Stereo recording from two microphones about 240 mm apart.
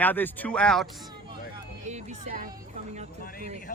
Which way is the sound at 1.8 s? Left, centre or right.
Right.